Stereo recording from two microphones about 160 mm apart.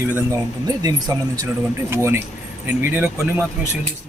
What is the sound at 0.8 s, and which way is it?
Speech, 20° right (ahead or behind).